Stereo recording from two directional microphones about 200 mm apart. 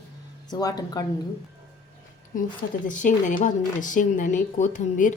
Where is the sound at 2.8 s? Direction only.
40° left (ahead or behind).